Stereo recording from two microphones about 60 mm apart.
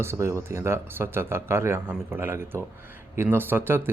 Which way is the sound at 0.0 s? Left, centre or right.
Right.